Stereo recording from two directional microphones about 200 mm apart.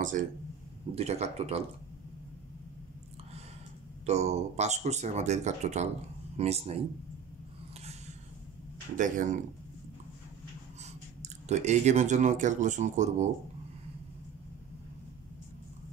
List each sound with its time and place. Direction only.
0.2 s speech: 40° right (ahead or behind)
4.0 s speech: 35° right (ahead or behind)
8.9 s speech: 40° right (ahead or behind)
11.2 s speech: 35° right (ahead or behind)